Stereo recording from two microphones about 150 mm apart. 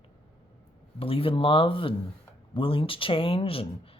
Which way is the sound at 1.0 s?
35° left (ahead or behind).